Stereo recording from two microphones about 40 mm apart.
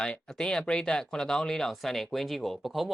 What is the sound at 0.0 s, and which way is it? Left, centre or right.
Speech, left.